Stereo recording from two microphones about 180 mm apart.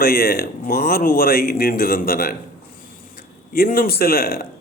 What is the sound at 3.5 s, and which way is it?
Speech, 50° left (ahead or behind).